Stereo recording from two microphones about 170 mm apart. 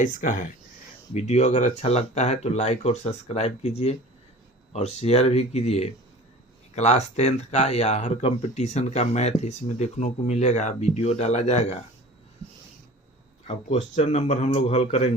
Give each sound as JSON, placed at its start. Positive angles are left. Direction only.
{"t": 0.0, "sound": "speech", "side_deg": 50}
{"t": 13.5, "sound": "speech", "side_deg": 40}